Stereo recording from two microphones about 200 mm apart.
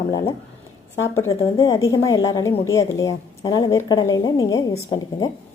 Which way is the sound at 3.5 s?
20° left (ahead or behind).